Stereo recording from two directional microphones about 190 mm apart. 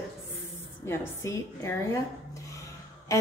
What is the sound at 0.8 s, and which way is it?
Speech, 10° left (ahead or behind).